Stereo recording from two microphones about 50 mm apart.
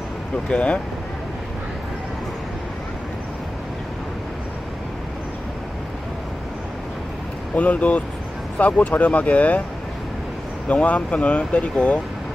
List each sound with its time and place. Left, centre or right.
0.5 s speech: left
7.5 s speech: left
10.7 s speech: left